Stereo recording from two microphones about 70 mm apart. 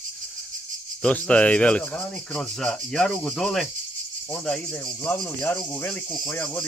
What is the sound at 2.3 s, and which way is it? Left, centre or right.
Speech, centre.